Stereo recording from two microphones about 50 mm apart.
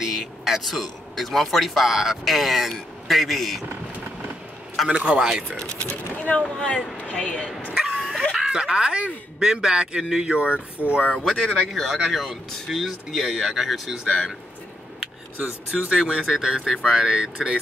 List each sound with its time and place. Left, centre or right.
0.0 s a man's voice: centre
4.8 s a man's voice: right
5.6 s speech: centre
7.7 s bow-wow: centre
8.3 s speech: centre
10.8 s speech: right
11.4 s speech: centre
15.7 s speech: centre